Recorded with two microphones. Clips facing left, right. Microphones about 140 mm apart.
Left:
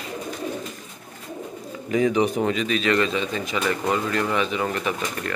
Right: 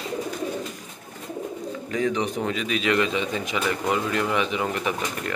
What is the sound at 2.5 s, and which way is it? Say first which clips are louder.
Speech: left 2 dB; 10° right (ahead or behind).